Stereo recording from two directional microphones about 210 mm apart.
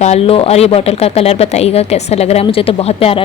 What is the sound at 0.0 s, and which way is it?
A woman's voice, 30° left (ahead or behind).